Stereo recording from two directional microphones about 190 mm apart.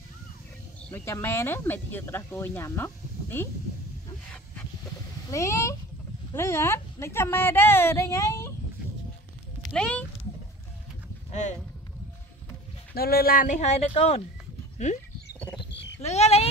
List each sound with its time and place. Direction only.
0.8 s speech: 15° left (ahead or behind)
5.3 s speech: 15° left (ahead or behind)
9.6 s speech: 5° left (ahead or behind)
12.9 s speech: 55° left (ahead or behind); by 14.9 s 35° left (ahead or behind)
15.7 s a sound: 65° left (ahead or behind)
16.0 s frog: 35° left (ahead or behind)